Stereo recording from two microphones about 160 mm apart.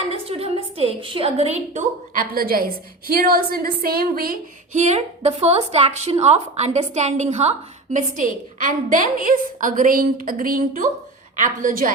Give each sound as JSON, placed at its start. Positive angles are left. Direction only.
{"t": 0.0, "sound": "a sound", "side_deg": -40}
{"t": 2.1, "sound": "a woman's voice", "side_deg": -65}
{"t": 4.7, "sound": "a woman's voice", "side_deg": -45}